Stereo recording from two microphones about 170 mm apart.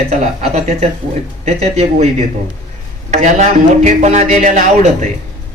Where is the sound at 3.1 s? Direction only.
45° right (ahead or behind).